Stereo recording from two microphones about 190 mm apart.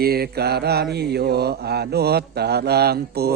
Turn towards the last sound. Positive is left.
turn(degrees=-55)  # may be behind; listen again after turning